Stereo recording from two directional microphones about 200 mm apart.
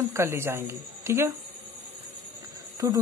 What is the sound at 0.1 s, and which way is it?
Speech, 15° right (ahead or behind).